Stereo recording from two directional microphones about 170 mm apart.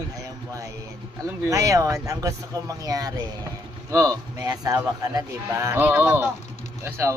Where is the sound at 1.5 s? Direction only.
20° right (ahead or behind).